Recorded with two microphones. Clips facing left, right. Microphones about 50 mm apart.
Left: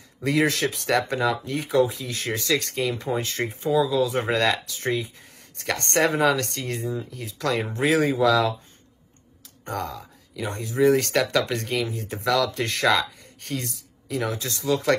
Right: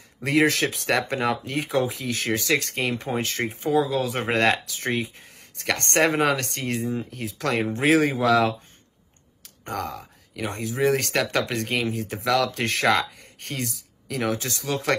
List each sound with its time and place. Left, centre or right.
0.2 s speech: right
9.7 s speech: right